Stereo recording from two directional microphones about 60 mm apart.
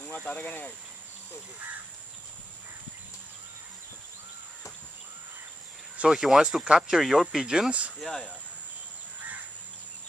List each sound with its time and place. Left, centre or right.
0.1 s speech: left
6.0 s speech: centre
7.0 s speech: centre
8.0 s speech: centre